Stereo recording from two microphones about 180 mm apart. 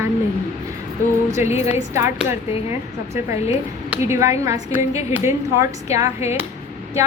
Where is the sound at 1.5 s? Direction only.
35° left (ahead or behind).